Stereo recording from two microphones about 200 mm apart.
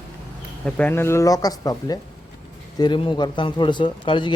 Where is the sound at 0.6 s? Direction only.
5° left (ahead or behind); by 4.3 s 25° left (ahead or behind).